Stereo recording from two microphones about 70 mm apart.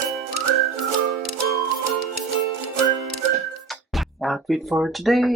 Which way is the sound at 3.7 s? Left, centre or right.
Centre.